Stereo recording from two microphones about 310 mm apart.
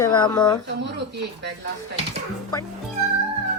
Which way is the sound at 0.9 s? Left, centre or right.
Right.